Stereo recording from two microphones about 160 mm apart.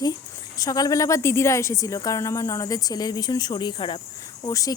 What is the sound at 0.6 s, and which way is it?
A woman's voice, 20° left (ahead or behind).